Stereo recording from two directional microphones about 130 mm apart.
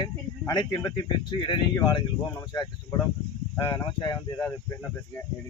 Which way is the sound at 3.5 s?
30° left (ahead or behind).